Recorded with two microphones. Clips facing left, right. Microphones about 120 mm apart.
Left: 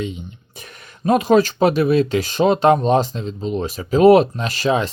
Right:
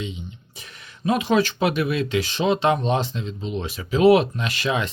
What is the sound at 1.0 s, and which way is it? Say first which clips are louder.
Speech: left 6 dB; 45° left (ahead or behind).